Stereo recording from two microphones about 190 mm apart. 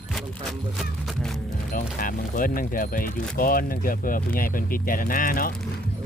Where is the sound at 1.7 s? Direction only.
45° left (ahead or behind).